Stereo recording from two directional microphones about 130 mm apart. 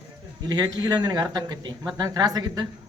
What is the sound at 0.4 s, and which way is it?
Speech, 30° right (ahead or behind).